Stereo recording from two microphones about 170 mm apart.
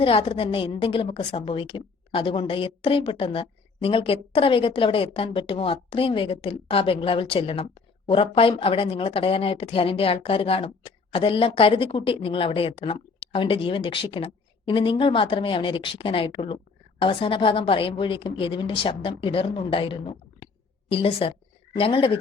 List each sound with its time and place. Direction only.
0.0 s a woman's voice: 35° left (ahead or behind)